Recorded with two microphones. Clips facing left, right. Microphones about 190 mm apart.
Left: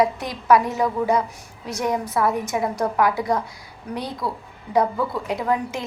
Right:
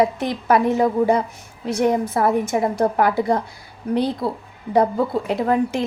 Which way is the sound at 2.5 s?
40° right (ahead or behind).